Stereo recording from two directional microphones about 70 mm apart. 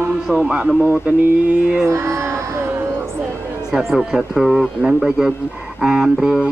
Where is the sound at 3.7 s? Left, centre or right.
Centre.